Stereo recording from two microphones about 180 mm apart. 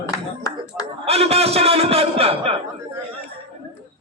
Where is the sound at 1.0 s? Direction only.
35° right (ahead or behind).